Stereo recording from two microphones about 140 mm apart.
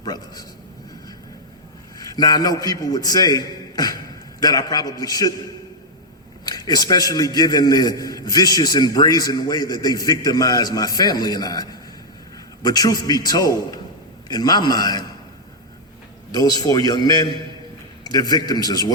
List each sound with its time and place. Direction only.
0.0 s a man's voice: 30° left (ahead or behind)
2.0 s a man's voice: 30° left (ahead or behind)
6.4 s a man's voice: 30° left (ahead or behind)
16.3 s a man's voice: 30° left (ahead or behind)